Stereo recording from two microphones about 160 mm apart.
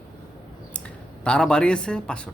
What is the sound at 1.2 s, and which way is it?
A man's voice, 5° left (ahead or behind).